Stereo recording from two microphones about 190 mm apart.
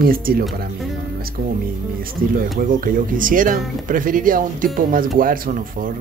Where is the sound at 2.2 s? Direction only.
50° right (ahead or behind).